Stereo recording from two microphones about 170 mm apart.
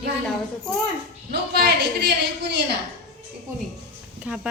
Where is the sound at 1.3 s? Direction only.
70° right (ahead or behind).